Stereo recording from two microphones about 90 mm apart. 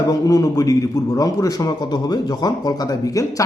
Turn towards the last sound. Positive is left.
turn(degrees=40)  # may be behind; listen again after turning